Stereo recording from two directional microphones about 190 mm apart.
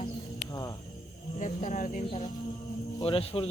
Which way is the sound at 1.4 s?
40° left (ahead or behind).